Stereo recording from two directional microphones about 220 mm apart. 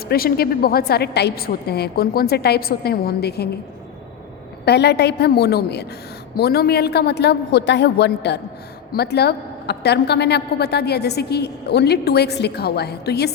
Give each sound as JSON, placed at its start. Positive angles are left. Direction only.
{"t": 0.1, "sound": "a woman's voice", "side_deg": 45}
{"t": 4.6, "sound": "a woman's voice", "side_deg": 50}